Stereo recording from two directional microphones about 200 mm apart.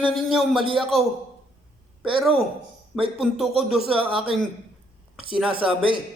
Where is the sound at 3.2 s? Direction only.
Centre (ahead or behind).